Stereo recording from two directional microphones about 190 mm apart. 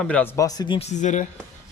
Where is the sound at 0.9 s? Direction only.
40° left (ahead or behind).